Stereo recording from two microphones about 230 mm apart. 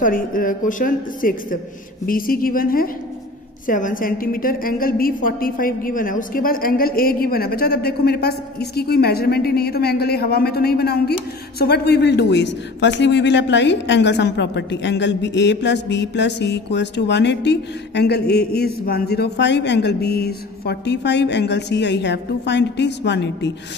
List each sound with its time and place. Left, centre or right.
0.0 s a woman's voice: left